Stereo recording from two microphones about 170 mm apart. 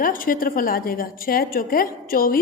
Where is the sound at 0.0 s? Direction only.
55° left (ahead or behind).